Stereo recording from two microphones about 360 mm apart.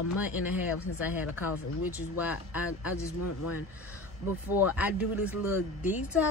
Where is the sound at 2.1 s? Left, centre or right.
Centre.